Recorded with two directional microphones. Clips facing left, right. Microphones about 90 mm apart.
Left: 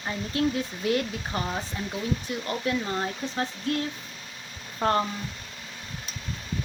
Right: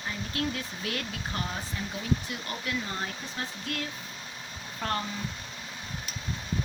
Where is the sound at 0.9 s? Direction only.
25° left (ahead or behind).